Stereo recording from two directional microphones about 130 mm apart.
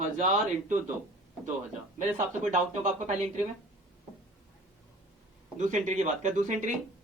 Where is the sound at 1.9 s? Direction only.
65° right (ahead or behind).